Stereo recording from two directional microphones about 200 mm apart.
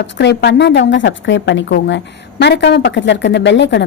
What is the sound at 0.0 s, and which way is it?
A woman's voice, 60° left (ahead or behind).